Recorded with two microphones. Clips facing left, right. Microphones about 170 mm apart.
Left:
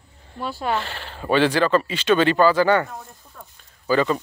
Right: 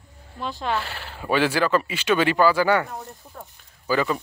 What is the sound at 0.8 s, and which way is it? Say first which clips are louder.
Speech: left 2 dB; 10° right (ahead or behind).